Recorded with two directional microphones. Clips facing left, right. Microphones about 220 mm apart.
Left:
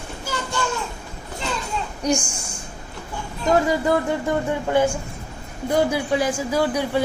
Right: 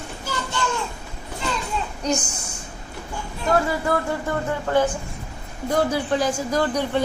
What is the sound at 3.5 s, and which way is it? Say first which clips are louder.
A woman's voice: left 3 dB; 20° left (ahead or behind).